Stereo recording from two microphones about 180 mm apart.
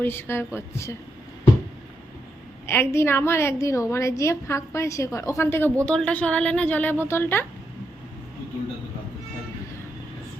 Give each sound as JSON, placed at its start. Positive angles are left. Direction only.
{"t": 0.0, "sound": "a woman's voice", "side_deg": 10}
{"t": 2.6, "sound": "a woman's voice", "side_deg": 15}